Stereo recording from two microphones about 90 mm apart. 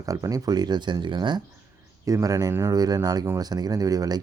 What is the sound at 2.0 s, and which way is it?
Speech, 40° right (ahead or behind).